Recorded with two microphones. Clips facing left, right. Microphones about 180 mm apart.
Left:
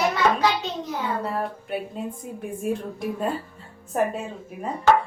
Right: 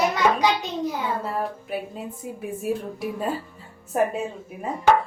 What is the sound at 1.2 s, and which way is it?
Speech, centre (ahead or behind).